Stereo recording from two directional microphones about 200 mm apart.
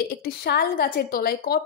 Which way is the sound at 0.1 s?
50° left (ahead or behind).